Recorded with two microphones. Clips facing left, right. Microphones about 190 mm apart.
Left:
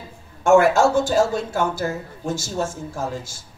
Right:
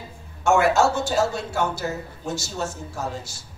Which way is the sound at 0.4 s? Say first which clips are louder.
Left 4 dB; 50° left (ahead or behind).